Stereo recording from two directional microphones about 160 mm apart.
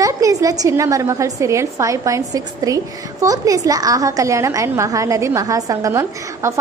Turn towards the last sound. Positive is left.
turn(degrees=-20)  # may be behind; listen again after turning